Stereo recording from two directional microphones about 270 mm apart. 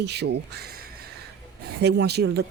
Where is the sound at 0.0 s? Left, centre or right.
Right.